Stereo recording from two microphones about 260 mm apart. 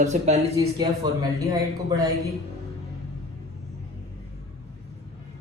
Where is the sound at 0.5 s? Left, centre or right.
Centre.